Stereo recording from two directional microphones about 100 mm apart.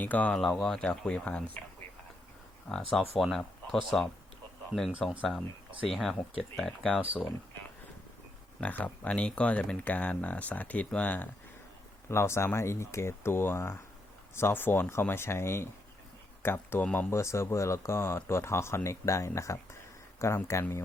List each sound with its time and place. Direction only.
0.0 s speech: 15° left (ahead or behind)
0.4 s speech: 5° left (ahead or behind)
2.9 s speech: centre (ahead or behind)
4.9 s speech: 10° right (ahead or behind)
5.9 s speech: centre (ahead or behind)
8.6 s speech: 15° left (ahead or behind)
12.0 s speech: 25° left (ahead or behind)
17.1 s speech: 30° left (ahead or behind)